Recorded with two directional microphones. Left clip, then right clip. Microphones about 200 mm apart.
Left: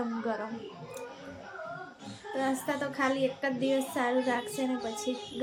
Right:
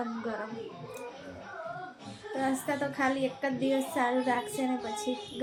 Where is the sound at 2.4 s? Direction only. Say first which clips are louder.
Right 1 dB; 5° left (ahead or behind).